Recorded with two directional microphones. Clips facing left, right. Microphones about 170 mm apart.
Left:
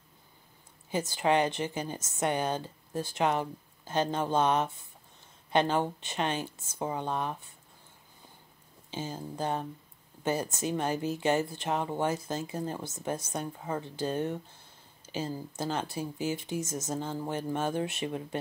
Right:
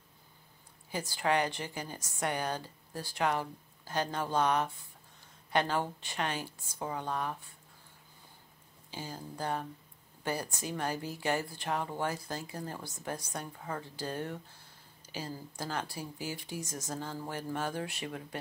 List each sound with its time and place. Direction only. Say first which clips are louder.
0.9 s speech: left 4 dB; 20° left (ahead or behind)
8.9 s speech: left 5 dB; 20° left (ahead or behind)